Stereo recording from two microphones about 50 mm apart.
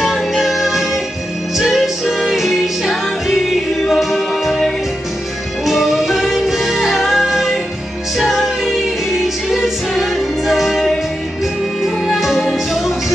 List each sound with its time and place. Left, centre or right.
0.0 s music: centre
11.8 s music: centre